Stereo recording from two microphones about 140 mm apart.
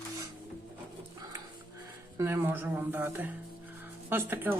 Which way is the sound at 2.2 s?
15° right (ahead or behind).